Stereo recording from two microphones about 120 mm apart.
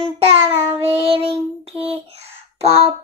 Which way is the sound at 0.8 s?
55° right (ahead or behind).